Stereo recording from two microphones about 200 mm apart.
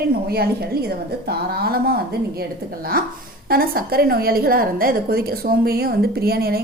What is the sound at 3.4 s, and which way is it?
A woman's voice, 45° right (ahead or behind).